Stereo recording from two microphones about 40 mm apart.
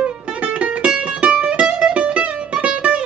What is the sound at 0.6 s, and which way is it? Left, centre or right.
Music, right.